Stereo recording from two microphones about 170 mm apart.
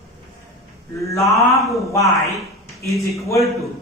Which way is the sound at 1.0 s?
15° left (ahead or behind).